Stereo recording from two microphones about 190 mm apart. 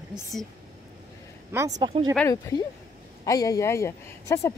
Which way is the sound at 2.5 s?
15° left (ahead or behind).